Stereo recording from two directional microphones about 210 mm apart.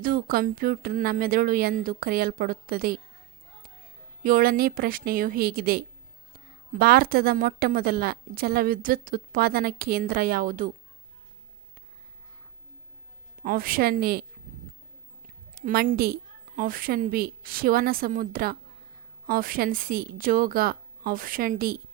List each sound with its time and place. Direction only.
0.0 s a woman's voice: 45° right (ahead or behind)
4.2 s a woman's voice: 40° right (ahead or behind)
13.4 s a woman's voice: 45° right (ahead or behind)
15.5 s a woman's voice: 45° right (ahead or behind)